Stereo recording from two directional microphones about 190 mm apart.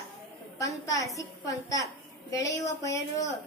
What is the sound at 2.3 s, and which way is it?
Speech, 15° left (ahead or behind).